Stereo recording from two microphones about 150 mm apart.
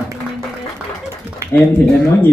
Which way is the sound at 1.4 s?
15° right (ahead or behind).